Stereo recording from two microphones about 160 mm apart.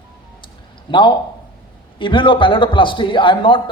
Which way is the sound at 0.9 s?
30° left (ahead or behind).